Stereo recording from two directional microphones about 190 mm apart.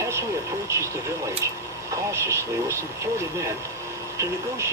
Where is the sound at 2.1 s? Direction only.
15° right (ahead or behind).